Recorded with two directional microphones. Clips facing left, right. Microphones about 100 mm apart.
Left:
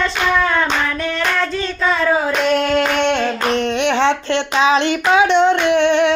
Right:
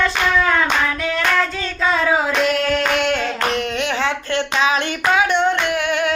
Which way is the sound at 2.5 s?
25° left (ahead or behind).